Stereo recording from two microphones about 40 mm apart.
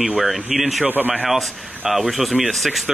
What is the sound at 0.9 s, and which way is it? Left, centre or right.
Speech, right.